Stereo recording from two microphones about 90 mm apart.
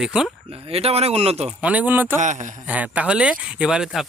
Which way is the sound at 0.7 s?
90° right.